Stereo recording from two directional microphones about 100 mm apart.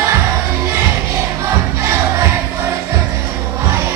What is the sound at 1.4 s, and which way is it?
Music, 25° right (ahead or behind).